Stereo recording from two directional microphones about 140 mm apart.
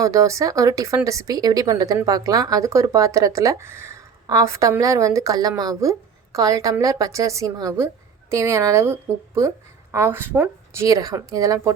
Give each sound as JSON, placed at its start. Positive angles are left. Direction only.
{"t": 0.0, "sound": "a woman's voice", "side_deg": -25}
{"t": 10.8, "sound": "speech", "side_deg": -25}